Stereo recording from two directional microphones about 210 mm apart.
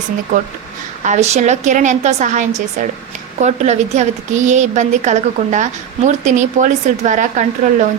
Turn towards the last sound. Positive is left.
turn(degrees=-35)  # may be behind; listen again after turning